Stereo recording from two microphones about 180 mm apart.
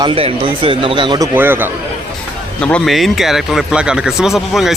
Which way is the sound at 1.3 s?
10° right (ahead or behind).